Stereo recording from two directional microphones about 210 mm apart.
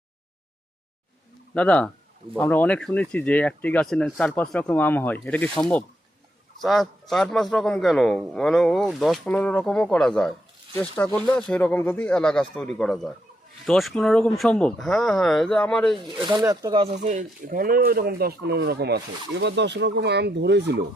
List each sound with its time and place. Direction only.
1.5 s a man's voice: 5° left (ahead or behind)
16.2 s speech: 15° right (ahead or behind); by 20.8 s 55° right (ahead or behind)